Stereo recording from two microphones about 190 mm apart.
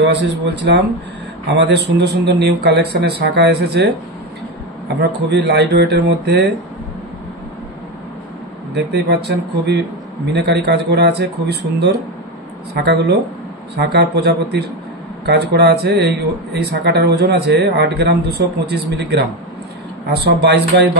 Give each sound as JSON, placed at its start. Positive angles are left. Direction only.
{"t": 0.0, "sound": "speech", "side_deg": -65}
{"t": 8.7, "sound": "speech", "side_deg": -60}
{"t": 12.7, "sound": "speech", "side_deg": -60}